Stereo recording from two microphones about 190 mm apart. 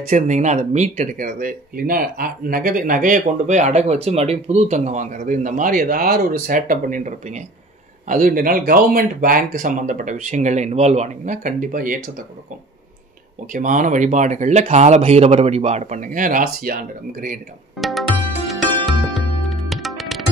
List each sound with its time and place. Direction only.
0.1 s speech: 40° right (ahead or behind)
13.5 s speech: 40° right (ahead or behind)
17.7 s music: centre (ahead or behind)